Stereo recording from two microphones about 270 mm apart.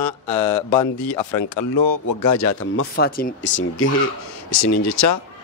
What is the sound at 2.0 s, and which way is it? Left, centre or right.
Speech, left.